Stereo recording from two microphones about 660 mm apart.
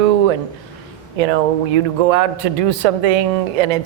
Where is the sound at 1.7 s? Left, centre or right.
Right.